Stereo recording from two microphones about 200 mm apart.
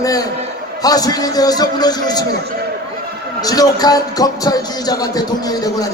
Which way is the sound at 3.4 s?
20° left (ahead or behind).